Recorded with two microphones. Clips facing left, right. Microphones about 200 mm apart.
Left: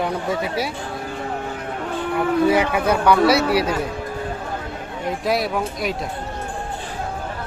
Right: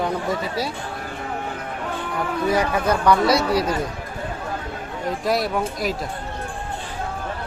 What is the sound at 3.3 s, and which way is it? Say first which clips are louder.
Speech: left 2 dB; 65° left (ahead or behind).